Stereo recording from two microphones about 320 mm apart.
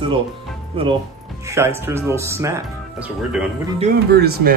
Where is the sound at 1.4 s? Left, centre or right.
Centre.